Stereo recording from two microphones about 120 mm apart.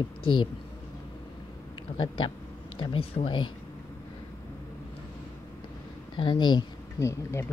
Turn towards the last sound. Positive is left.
turn(degrees=25)  # may be behind; listen again after turning